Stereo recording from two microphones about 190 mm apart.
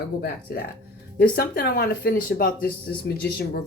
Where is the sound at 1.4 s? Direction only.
55° left (ahead or behind).